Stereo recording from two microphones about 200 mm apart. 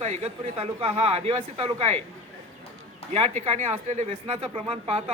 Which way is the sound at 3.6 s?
35° right (ahead or behind).